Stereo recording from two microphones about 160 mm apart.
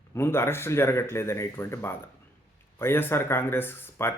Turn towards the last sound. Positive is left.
turn(degrees=15)  # may be behind; listen again after turning